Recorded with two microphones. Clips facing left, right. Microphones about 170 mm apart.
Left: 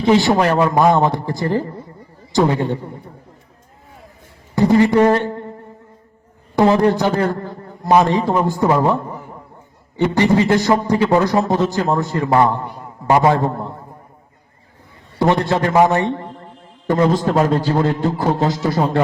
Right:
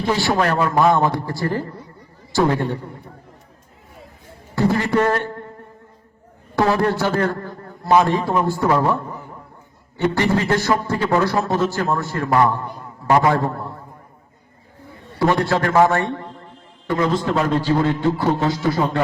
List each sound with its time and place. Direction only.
0.0 s a man's voice: 20° left (ahead or behind)
4.5 s a man's voice: 15° left (ahead or behind)
6.6 s a man's voice: 20° left (ahead or behind)
10.2 s a man's voice: 15° left (ahead or behind)
15.2 s a man's voice: 20° left (ahead or behind)
16.8 s a man's voice: 40° left (ahead or behind)